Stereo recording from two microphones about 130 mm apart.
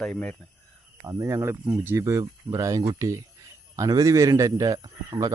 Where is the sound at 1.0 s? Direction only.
25° right (ahead or behind).